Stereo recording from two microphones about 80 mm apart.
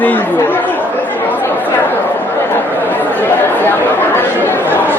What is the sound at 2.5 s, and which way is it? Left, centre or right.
Chatter, left.